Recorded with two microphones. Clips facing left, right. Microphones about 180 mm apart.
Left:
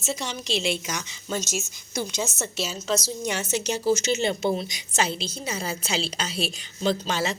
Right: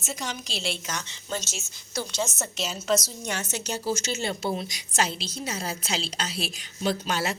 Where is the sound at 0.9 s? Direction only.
10° left (ahead or behind).